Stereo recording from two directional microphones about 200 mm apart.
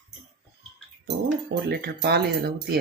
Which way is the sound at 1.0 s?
55° right (ahead or behind).